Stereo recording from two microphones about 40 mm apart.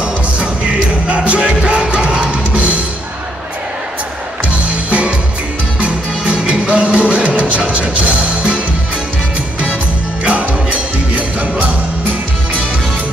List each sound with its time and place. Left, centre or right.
0.0 s music: right
4.5 s music: right
10.2 s music: right